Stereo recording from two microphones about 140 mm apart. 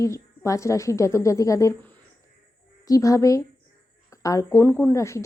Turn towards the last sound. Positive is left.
turn(degrees=20)  # may be behind; listen again after turning